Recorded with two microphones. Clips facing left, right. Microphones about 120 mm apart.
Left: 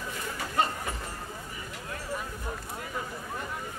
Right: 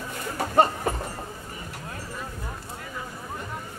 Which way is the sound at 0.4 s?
50° right (ahead or behind).